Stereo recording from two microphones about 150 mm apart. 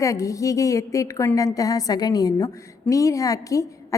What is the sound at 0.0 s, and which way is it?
A woman's voice, 20° left (ahead or behind).